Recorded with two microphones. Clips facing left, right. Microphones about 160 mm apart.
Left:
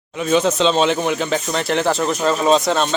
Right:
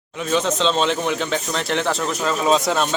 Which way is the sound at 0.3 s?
5° left (ahead or behind).